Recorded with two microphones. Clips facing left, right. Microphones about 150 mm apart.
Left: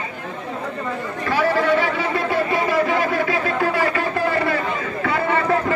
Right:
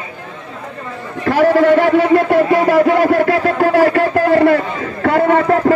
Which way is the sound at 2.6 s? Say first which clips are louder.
Right 8 dB; 75° right (ahead or behind).